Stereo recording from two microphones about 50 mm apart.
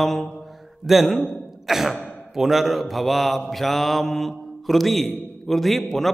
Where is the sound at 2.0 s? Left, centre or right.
Left.